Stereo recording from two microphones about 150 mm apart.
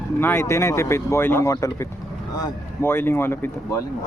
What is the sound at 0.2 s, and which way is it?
Speech, 15° left (ahead or behind).